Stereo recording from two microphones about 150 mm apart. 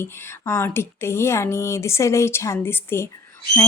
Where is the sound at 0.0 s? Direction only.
15° left (ahead or behind).